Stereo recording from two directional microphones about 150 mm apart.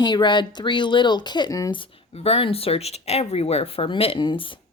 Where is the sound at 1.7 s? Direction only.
35° left (ahead or behind).